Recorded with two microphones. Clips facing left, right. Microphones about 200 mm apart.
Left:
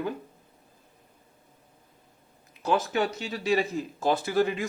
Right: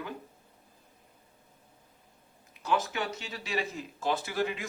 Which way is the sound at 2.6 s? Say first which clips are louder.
Left 5 dB; 35° left (ahead or behind).